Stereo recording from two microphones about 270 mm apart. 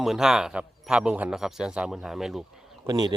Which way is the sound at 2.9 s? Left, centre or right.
Centre.